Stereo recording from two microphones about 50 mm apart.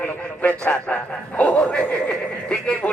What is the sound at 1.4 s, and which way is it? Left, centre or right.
Speech, left.